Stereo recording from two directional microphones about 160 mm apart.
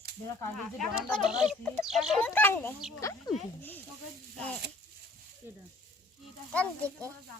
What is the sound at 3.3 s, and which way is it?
Speech, 25° left (ahead or behind).